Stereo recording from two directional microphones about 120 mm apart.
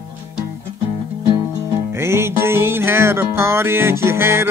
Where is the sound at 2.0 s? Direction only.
20° right (ahead or behind).